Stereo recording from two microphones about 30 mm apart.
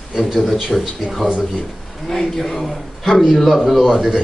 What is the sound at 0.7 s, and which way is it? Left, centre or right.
Speech, centre.